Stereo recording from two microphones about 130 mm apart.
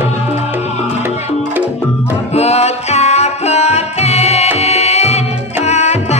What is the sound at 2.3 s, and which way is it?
Music, 55° left (ahead or behind).